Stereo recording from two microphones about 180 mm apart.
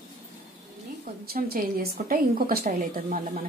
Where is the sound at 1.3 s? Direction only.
55° right (ahead or behind).